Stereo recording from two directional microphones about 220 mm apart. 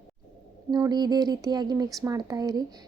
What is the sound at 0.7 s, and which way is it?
Speech, 20° right (ahead or behind).